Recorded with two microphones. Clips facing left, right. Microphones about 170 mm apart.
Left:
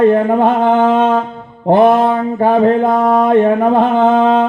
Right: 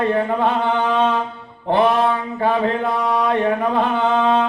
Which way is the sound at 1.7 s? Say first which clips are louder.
Left 7 dB; 45° left (ahead or behind).